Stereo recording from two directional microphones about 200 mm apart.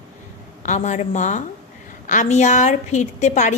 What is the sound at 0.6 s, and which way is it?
Speech, 35° left (ahead or behind).